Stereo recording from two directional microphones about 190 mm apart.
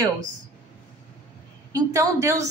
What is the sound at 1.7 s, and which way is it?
Speech, 15° right (ahead or behind).